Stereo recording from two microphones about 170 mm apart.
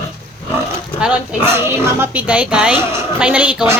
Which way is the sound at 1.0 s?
10° right (ahead or behind).